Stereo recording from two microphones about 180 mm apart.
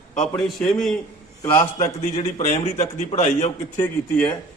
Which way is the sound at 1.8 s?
40° left (ahead or behind).